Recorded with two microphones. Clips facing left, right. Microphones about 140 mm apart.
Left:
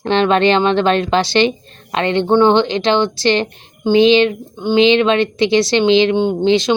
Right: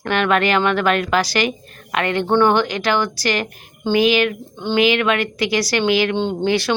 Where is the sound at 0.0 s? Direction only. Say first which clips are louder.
Left 5 dB; 25° left (ahead or behind).